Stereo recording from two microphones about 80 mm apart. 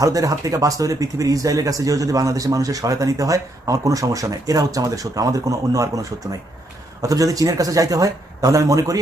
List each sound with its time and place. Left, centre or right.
0.0 s speech: right